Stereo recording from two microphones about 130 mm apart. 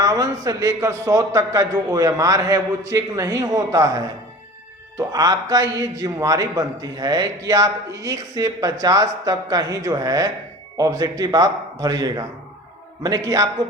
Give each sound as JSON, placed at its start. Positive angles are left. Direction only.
{"t": 0.0, "sound": "a man's voice", "side_deg": -25}